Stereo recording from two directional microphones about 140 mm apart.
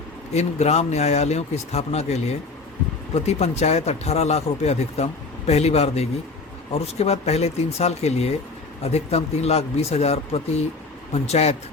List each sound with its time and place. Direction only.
0.3 s speech: 50° left (ahead or behind)